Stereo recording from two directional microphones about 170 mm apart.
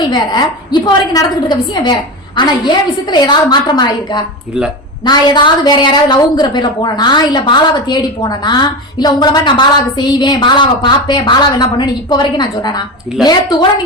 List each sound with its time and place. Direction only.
0.0 s a woman's voice: 25° left (ahead or behind)